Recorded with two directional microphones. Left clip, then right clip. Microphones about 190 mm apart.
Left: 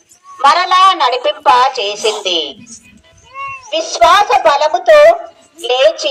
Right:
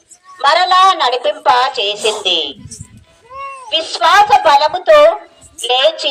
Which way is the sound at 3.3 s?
70° right (ahead or behind).